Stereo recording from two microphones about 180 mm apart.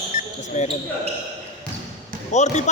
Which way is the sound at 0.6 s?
40° left (ahead or behind).